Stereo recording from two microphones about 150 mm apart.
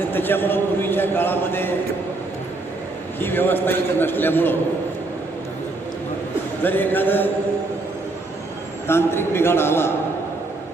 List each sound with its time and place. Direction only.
0.0 s a man's voice: 15° left (ahead or behind)
3.2 s a man's voice: 15° left (ahead or behind)
6.6 s a man's voice: 15° left (ahead or behind)
8.9 s a man's voice: 15° left (ahead or behind)